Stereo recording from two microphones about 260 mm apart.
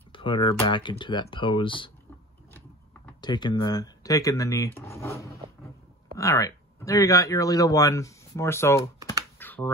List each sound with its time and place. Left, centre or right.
0.1 s speech: centre
3.2 s speech: centre
9.4 s computer keyboard: centre